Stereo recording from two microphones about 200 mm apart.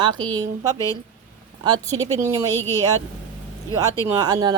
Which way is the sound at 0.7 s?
15° left (ahead or behind).